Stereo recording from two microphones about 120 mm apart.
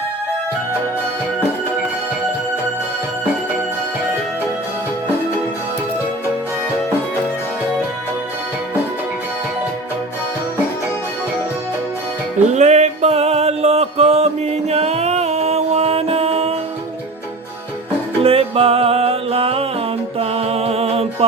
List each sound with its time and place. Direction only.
12.5 s music: 75° right (ahead or behind); by 16.6 s 55° right (ahead or behind)
18.2 s music: 55° right (ahead or behind)